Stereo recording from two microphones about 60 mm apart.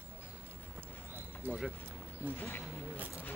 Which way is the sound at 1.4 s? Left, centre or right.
Right.